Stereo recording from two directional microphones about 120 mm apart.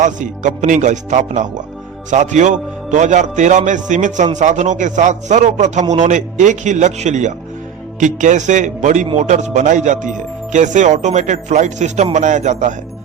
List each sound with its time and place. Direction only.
0.0 s speech: 90° right
5.9 s speech: 90° right
9.1 s speech: 80° right